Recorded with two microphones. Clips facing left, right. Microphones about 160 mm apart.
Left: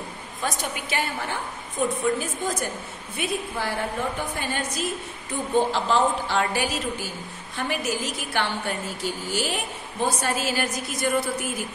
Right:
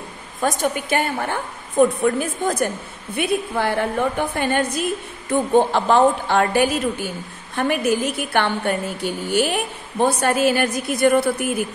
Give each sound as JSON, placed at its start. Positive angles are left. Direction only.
{"t": 0.4, "sound": "a woman's voice", "side_deg": -50}